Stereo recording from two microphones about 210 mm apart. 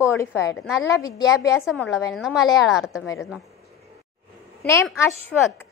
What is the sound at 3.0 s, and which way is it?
Speech, 15° left (ahead or behind).